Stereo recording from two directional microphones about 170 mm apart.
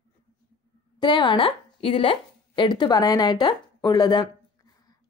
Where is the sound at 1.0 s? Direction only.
25° left (ahead or behind).